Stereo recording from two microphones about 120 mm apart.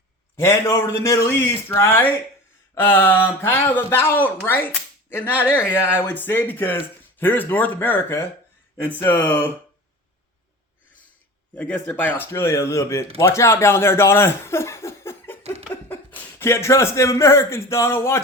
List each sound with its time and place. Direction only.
0.3 s a man's voice: 20° left (ahead or behind)
11.5 s a man's voice: 15° left (ahead or behind)